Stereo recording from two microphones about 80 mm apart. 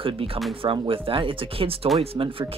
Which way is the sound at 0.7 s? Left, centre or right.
Right.